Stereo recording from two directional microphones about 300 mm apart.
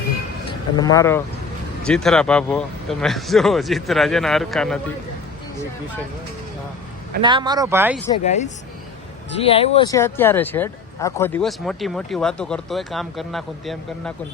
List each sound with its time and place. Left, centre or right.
0.8 s speech: centre
7.2 s speech: centre
8.1 s speech: left; by 14.1 s centre